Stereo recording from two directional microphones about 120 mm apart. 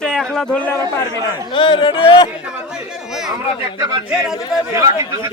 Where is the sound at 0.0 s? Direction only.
5° left (ahead or behind).